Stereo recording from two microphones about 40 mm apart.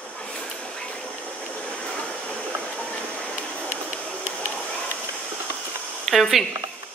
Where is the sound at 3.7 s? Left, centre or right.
Right.